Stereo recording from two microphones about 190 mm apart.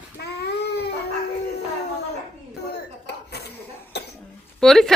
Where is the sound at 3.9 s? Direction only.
60° left (ahead or behind).